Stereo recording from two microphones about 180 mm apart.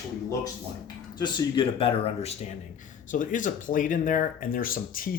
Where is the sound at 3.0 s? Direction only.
45° left (ahead or behind).